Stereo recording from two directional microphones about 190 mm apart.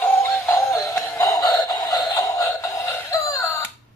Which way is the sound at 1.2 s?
20° left (ahead or behind).